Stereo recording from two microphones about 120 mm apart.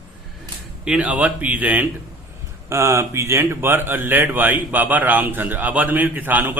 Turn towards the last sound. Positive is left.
turn(degrees=-15)  # may be behind; listen again after turning